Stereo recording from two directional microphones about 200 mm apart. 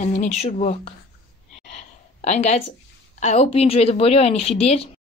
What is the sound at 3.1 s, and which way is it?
Speech, 35° left (ahead or behind).